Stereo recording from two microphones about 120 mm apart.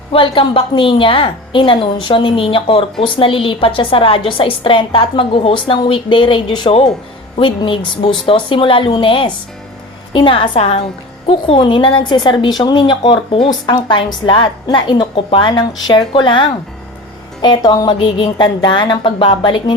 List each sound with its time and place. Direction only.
0.1 s a woman's voice: 45° left (ahead or behind)